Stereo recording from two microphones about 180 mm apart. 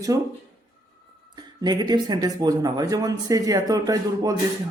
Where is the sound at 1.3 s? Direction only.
25° right (ahead or behind).